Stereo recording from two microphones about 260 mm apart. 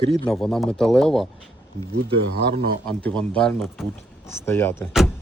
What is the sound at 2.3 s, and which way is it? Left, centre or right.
Speech, right.